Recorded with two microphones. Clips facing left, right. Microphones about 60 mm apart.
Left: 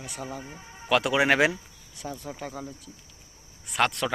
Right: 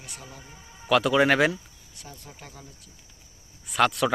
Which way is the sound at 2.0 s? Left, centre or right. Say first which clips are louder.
Left 10 dB; left.